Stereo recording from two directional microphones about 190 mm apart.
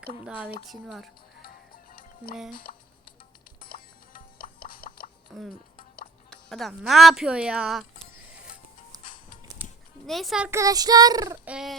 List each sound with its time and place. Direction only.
0.3 s speech: 5° right (ahead or behind)
1.4 s music: 50° left (ahead or behind)
5.3 s speech: centre (ahead or behind)
9.6 s music: 10° right (ahead or behind)
10.1 s speech: centre (ahead or behind)
10.5 s child singing: 15° right (ahead or behind)
11.4 s speech: centre (ahead or behind)